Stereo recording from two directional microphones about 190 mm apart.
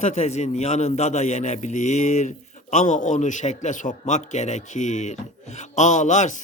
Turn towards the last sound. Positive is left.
turn(degrees=40)  # may be behind; listen again after turning